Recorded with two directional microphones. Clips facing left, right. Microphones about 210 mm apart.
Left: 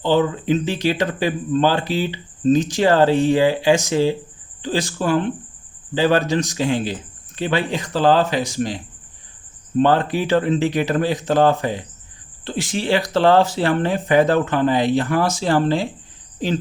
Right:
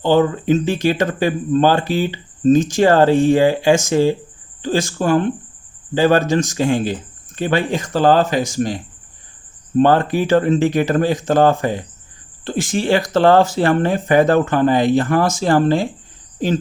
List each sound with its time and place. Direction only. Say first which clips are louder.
0.0 s speech: right 3 dB; 50° right (ahead or behind)